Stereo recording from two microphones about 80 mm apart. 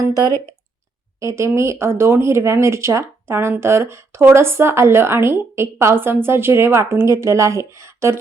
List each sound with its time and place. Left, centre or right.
0.1 s speech: right
1.2 s speech: right